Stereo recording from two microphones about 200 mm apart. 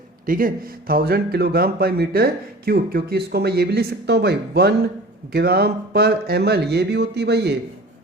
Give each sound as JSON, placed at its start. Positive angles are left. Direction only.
{"t": 0.3, "sound": "speech", "side_deg": -45}